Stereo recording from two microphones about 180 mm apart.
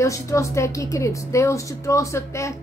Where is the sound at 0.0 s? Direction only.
15° left (ahead or behind).